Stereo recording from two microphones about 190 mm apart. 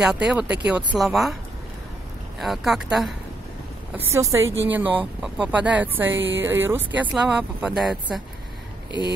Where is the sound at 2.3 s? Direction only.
Centre (ahead or behind).